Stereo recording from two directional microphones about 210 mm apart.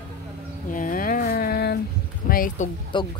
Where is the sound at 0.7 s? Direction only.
40° left (ahead or behind).